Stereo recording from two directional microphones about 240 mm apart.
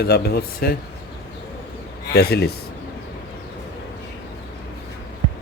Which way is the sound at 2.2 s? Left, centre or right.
Left.